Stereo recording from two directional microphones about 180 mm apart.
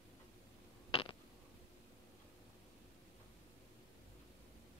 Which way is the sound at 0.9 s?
30° left (ahead or behind).